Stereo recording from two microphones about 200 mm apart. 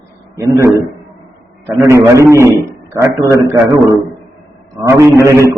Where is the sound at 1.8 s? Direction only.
15° right (ahead or behind).